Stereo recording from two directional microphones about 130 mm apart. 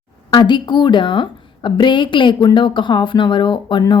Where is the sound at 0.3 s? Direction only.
35° left (ahead or behind).